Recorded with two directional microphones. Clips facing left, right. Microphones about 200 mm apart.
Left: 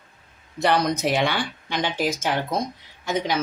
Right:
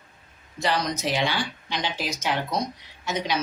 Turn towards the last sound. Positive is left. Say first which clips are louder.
# left 3 dB
turn(degrees=50)  # may be behind; listen again after turning